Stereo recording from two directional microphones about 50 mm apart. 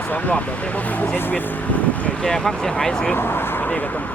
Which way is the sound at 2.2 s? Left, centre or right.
Centre.